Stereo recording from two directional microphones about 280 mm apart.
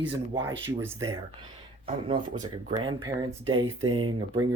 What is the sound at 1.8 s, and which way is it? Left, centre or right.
Speech, centre.